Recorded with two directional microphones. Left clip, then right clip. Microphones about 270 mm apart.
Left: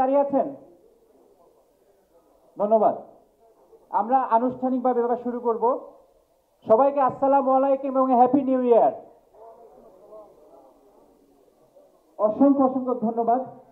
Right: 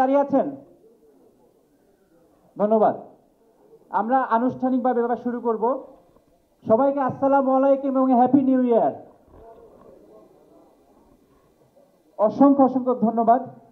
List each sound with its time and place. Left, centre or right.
0.0 s speech: right
2.5 s a man's voice: right
6.6 s a man's voice: centre
12.2 s a man's voice: right